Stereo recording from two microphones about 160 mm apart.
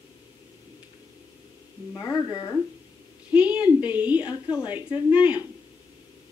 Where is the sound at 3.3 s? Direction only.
10° right (ahead or behind).